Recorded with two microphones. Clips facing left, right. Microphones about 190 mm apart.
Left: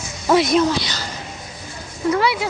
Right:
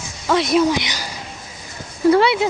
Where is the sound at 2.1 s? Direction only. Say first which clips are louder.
Right 2 dB; 25° right (ahead or behind).